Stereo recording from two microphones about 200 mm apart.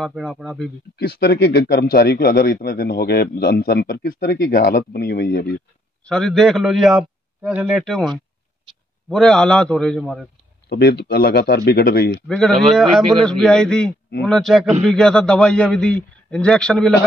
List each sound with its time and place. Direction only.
0.0 s a man's voice: centre (ahead or behind)
0.9 s speech: 55° left (ahead or behind)
6.0 s a man's voice: centre (ahead or behind)
9.1 s a man's voice: 5° left (ahead or behind)
10.7 s speech: 55° left (ahead or behind)
12.3 s a man's voice: 5° left (ahead or behind)